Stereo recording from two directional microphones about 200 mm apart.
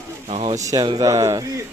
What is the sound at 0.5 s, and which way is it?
Speech, 15° right (ahead or behind).